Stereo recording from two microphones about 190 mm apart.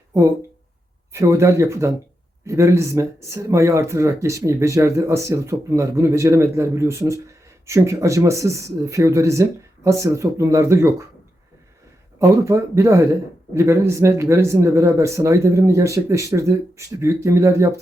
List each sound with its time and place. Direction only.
1.1 s speech: 15° right (ahead or behind)
12.2 s speech: 15° right (ahead or behind)